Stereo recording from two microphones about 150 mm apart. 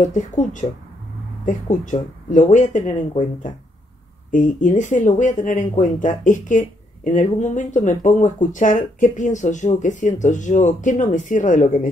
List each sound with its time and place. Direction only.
0.1 s speech: 55° left (ahead or behind)
4.3 s speech: 60° left (ahead or behind)